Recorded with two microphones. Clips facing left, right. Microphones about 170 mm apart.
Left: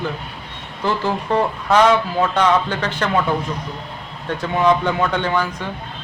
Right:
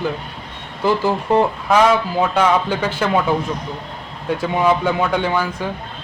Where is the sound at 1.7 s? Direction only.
10° right (ahead or behind).